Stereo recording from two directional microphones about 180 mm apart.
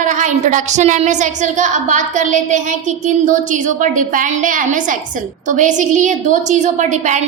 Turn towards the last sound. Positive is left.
turn(degrees=-40)  # may be behind; listen again after turning